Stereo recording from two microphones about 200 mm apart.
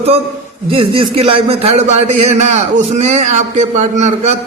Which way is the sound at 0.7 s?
25° right (ahead or behind).